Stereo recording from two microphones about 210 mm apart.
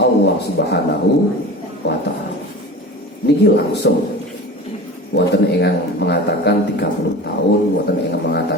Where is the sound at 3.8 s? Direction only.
50° left (ahead or behind).